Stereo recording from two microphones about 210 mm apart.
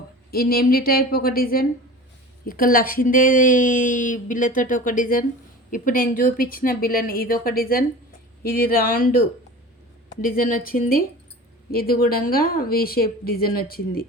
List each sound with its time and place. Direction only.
0.3 s a woman's voice: 45° left (ahead or behind)